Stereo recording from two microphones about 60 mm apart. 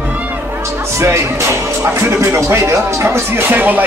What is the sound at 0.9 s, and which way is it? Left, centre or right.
Speech, right.